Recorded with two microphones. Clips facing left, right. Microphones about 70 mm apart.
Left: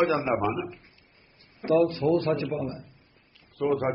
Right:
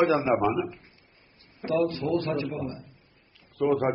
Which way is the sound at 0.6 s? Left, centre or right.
Right.